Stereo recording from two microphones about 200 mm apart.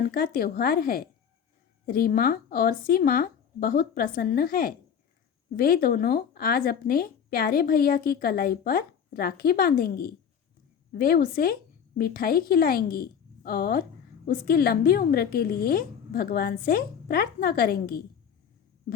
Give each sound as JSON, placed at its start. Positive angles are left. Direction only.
{"t": 0.0, "sound": "speech", "side_deg": 45}